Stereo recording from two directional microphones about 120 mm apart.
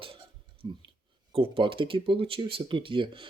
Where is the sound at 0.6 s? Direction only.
50° right (ahead or behind).